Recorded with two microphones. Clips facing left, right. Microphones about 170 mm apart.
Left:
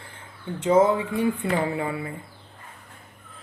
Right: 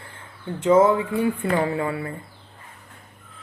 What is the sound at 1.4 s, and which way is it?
Speech, 15° left (ahead or behind).